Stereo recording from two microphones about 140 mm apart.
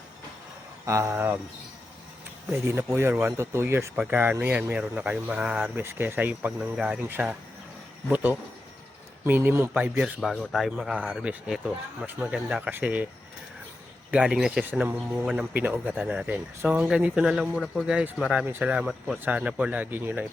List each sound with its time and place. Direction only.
0.9 s speech: 20° right (ahead or behind)
2.5 s speech: 15° right (ahead or behind)
10.2 s a man's voice: 5° left (ahead or behind)
14.1 s a man's voice: 5° right (ahead or behind)